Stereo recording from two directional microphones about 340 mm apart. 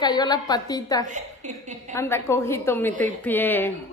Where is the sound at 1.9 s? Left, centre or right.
Centre.